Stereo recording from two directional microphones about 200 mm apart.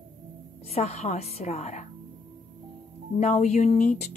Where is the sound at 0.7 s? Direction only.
35° left (ahead or behind).